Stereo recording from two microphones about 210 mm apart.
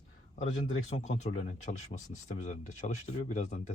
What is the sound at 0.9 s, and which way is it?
Speech, 35° left (ahead or behind).